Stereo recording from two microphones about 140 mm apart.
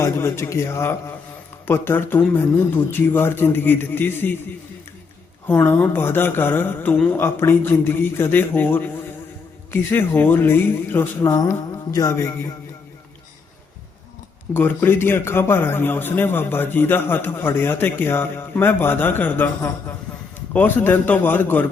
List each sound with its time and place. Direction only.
0.0 s a man's voice: 20° left (ahead or behind)
5.5 s a man's voice: 15° left (ahead or behind)
14.5 s a man's voice: 15° left (ahead or behind)